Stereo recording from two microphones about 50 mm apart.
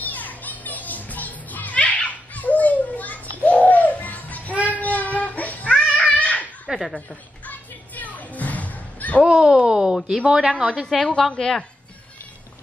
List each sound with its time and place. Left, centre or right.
0.0 s children playing: left
4.7 s child singing: left
6.7 s a woman's voice: centre
7.4 s music: left
9.2 s speech: centre
11.1 s a woman's voice: centre